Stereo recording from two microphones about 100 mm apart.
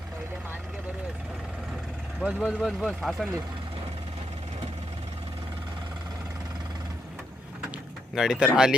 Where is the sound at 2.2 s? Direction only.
10° right (ahead or behind).